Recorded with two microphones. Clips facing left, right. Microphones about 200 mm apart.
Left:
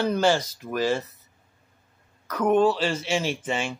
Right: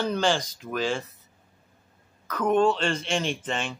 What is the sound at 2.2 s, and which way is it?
Speech, 10° left (ahead or behind).